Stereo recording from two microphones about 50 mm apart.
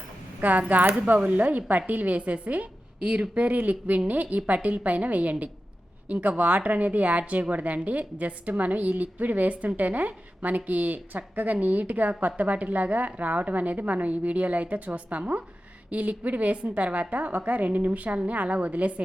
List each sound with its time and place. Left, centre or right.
0.4 s a woman's voice: right